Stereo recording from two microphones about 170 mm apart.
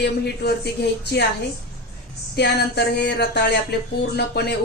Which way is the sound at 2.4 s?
75° left (ahead or behind).